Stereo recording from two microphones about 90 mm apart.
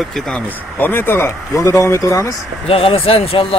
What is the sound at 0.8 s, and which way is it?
Speech, 25° left (ahead or behind).